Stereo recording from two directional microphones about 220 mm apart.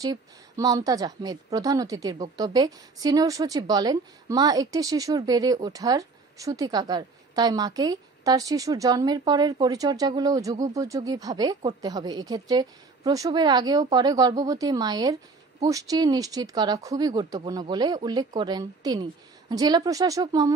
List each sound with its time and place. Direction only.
0.0 s a woman's voice: 15° right (ahead or behind)